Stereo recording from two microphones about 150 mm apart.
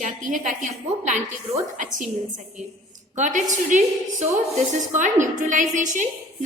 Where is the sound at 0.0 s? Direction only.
60° right (ahead or behind).